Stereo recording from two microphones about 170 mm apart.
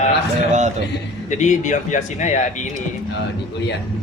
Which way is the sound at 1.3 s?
45° left (ahead or behind).